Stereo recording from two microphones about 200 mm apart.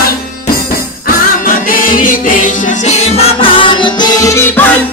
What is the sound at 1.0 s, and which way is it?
Music, 45° left (ahead or behind).